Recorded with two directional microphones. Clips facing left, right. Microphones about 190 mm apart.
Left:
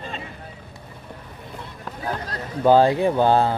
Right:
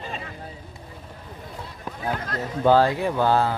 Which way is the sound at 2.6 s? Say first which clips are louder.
Left 3 dB; 20° left (ahead or behind).